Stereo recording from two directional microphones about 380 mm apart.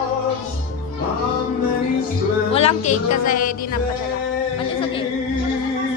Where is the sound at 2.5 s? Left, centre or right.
Centre.